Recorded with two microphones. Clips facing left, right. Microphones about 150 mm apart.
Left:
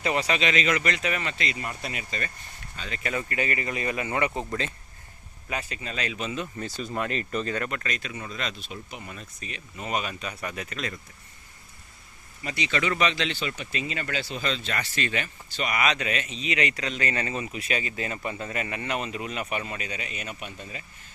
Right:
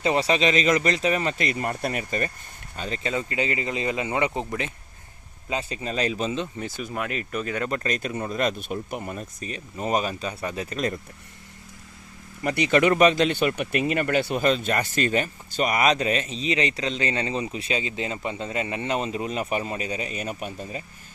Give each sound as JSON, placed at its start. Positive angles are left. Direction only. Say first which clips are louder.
{"t": 0.0, "sound": "speech", "louder": "right 4 dB", "side_deg": -30}
{"t": 3.0, "sound": "speech", "louder": "right 2 dB", "side_deg": -20}
{"t": 7.7, "sound": "speech", "louder": "right 6 dB", "side_deg": -40}
{"t": 12.4, "sound": "speech", "louder": "right 8 dB", "side_deg": -55}